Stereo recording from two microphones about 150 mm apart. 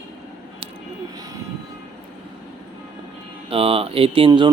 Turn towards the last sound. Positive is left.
turn(degrees=-30)  # may be behind; listen again after turning